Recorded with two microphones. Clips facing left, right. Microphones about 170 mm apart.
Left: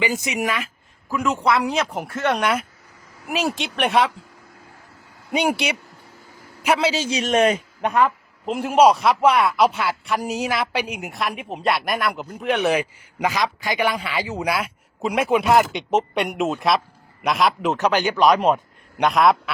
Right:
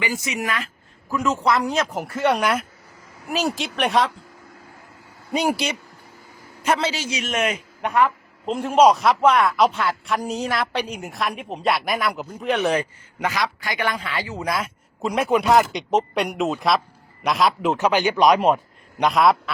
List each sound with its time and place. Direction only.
0.0 s speech: 20° left (ahead or behind)
1.4 s a man's voice: centre (ahead or behind)
5.3 s a man's voice: centre (ahead or behind)
7.1 s a man's voice: 30° left (ahead or behind)
8.4 s a man's voice: 5° left (ahead or behind)
14.4 s a man's voice: 5° left (ahead or behind)
17.7 s a man's voice: 10° right (ahead or behind)